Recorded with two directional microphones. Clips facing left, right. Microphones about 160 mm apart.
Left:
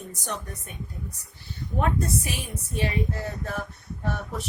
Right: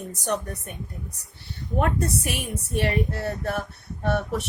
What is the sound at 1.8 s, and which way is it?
Speech, 70° right (ahead or behind).